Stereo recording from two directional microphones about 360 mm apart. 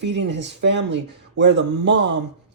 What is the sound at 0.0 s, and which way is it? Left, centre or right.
Speech, right.